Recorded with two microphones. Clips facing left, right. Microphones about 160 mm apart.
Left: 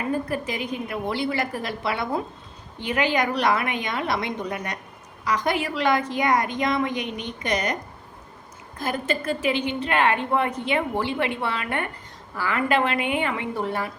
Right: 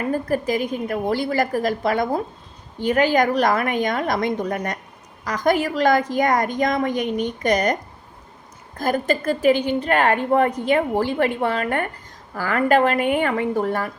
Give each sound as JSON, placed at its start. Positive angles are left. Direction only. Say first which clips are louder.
{"t": 0.1, "sound": "a woman's voice", "louder": "right 7 dB", "side_deg": -45}
{"t": 8.8, "sound": "a woman's voice", "louder": "right 5 dB", "side_deg": -40}